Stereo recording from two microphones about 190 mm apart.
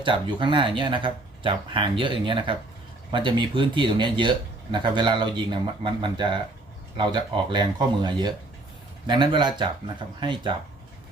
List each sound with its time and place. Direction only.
0.0 s speech: 25° right (ahead or behind)